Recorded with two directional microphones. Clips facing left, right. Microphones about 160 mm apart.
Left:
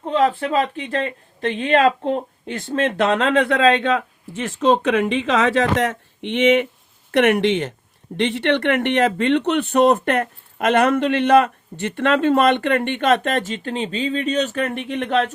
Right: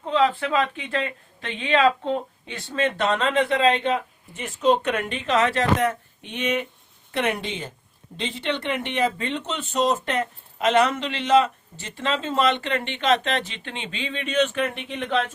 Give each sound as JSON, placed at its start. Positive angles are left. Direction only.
{"t": 0.0, "sound": "a sound", "side_deg": 50}
{"t": 0.3, "sound": "speech", "side_deg": 35}
{"t": 14.8, "sound": "speech", "side_deg": 55}